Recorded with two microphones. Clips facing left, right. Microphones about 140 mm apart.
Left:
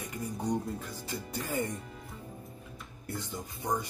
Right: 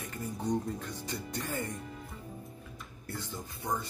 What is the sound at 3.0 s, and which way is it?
Speech, 15° left (ahead or behind).